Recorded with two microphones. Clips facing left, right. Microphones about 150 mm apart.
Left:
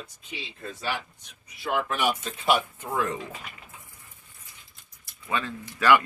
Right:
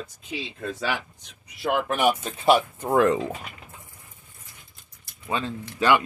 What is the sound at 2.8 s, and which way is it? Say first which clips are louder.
Speech: right 12 dB; 75° right (ahead or behind).